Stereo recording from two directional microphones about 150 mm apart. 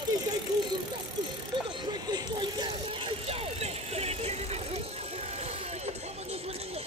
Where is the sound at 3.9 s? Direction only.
45° right (ahead or behind).